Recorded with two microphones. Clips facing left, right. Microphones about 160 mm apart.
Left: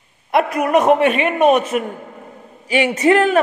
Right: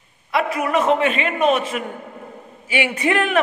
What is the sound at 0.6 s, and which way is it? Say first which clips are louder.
A man's voice: left 5 dB; 50° left (ahead or behind).